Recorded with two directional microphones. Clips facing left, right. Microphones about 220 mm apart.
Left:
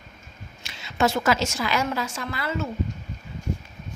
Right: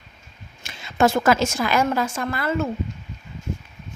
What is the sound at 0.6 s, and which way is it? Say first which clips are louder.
A woman's voice: right 4 dB; 50° right (ahead or behind).